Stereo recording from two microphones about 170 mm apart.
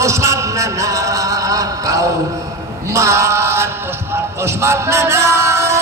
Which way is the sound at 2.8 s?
15° right (ahead or behind).